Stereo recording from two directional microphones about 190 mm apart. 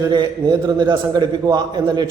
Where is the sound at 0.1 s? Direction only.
20° right (ahead or behind).